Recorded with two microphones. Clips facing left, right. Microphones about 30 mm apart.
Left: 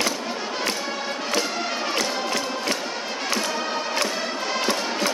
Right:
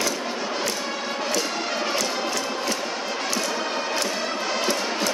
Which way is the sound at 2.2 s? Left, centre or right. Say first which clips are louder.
Left 1 dB; left.